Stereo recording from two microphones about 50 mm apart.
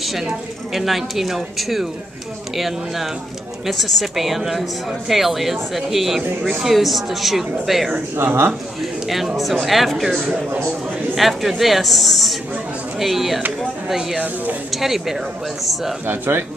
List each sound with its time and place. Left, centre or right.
0.0 s a sound: centre
0.7 s a woman's voice: centre
8.2 s a man's voice: right
9.0 s a woman's voice: centre
14.2 s speech: right
14.7 s a woman's voice: centre
16.1 s a man's voice: right